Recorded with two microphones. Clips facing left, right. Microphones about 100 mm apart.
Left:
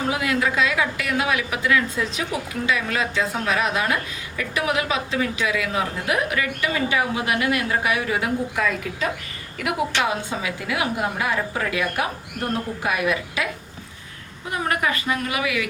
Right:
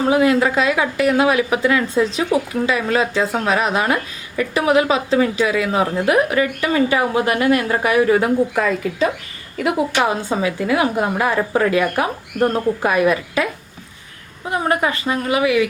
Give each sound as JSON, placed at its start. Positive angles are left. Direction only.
{"t": 0.1, "sound": "a woman's voice", "side_deg": -30}
{"t": 14.5, "sound": "a woman's voice", "side_deg": -30}